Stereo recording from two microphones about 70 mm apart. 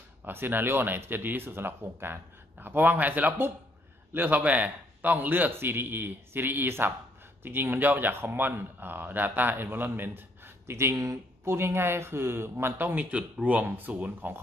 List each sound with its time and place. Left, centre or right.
0.2 s a man's voice: right
11.4 s a man's voice: right